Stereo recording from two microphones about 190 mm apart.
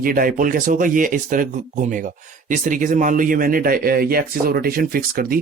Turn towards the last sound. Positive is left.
turn(degrees=-50)  # may be behind; listen again after turning